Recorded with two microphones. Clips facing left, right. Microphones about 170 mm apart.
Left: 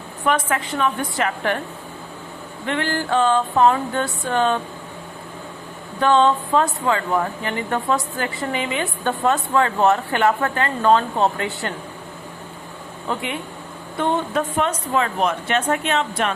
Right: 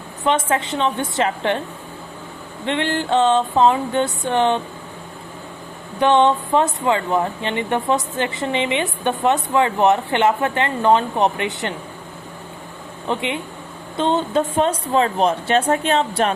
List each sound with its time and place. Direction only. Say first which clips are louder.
0.3 s a woman's voice: right 2 dB; 25° right (ahead or behind)
2.6 s a woman's voice: right 2 dB; 25° right (ahead or behind)
6.0 s a woman's voice: right 1 dB; 20° right (ahead or behind)
13.1 s a woman's voice: right 3 dB; 20° right (ahead or behind)